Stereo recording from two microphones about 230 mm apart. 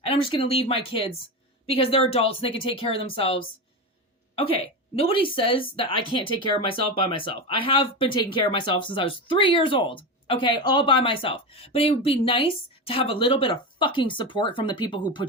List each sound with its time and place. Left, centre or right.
0.1 s speech: left